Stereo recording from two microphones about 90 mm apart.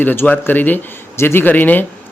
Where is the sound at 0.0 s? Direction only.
20° left (ahead or behind).